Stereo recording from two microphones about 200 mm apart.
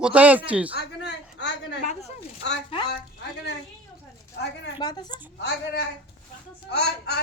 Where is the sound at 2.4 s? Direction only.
60° left (ahead or behind).